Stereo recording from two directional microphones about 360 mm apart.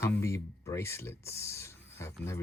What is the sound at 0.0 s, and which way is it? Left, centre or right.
Speech, centre.